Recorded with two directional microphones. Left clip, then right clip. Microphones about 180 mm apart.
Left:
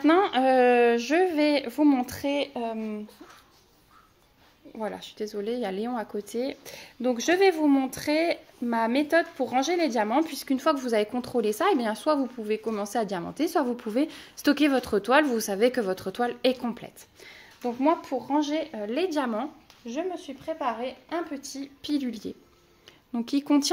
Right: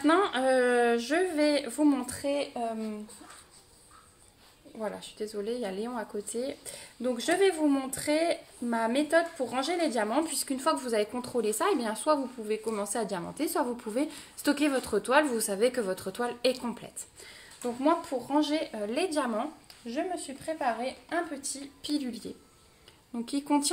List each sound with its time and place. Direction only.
0.0 s a sound: 35° left (ahead or behind)
2.1 s speech: 55° left (ahead or behind)
4.7 s speech: 50° left (ahead or behind)